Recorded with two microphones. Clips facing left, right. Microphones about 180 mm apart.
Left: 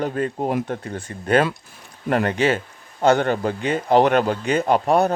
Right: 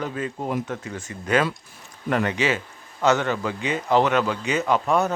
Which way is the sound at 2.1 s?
45° left (ahead or behind).